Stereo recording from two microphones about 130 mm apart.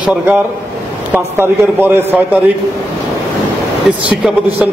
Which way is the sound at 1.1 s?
15° right (ahead or behind).